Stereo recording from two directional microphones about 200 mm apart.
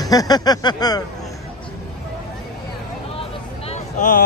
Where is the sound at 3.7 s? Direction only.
40° left (ahead or behind).